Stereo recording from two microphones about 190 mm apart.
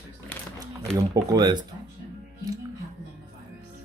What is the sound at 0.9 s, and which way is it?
Speech, 20° right (ahead or behind).